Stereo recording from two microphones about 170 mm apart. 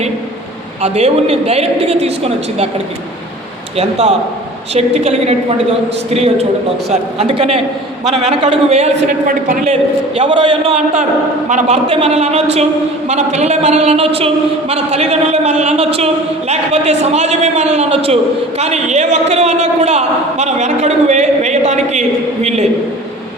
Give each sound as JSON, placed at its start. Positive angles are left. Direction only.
{"t": 0.8, "sound": "a man's voice", "side_deg": -40}
{"t": 3.8, "sound": "a man's voice", "side_deg": -40}
{"t": 10.2, "sound": "a man's voice", "side_deg": -35}